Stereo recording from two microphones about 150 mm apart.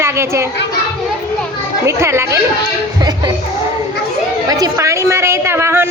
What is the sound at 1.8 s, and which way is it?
Speech, 20° right (ahead or behind).